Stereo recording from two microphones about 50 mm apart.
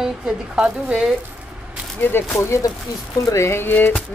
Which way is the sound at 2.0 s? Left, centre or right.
Left.